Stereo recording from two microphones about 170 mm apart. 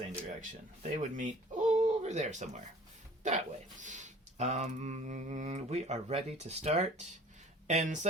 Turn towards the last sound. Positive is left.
turn(degrees=-45)  # may be behind; listen again after turning